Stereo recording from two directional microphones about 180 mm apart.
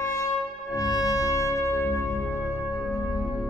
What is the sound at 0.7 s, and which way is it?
Music, 20° left (ahead or behind).